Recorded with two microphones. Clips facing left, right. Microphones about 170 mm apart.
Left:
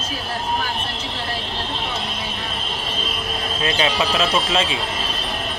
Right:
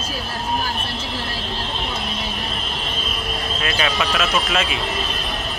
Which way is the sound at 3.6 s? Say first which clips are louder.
Left 2 dB; 25° left (ahead or behind).